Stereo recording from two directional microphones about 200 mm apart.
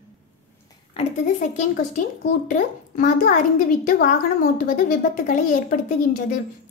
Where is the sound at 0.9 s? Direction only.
35° left (ahead or behind).